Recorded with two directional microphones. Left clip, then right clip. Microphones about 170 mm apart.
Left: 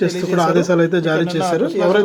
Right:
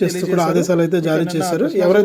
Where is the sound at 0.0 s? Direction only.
30° right (ahead or behind).